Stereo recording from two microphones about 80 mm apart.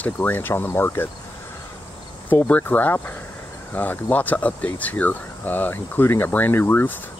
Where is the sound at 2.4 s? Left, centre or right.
Centre.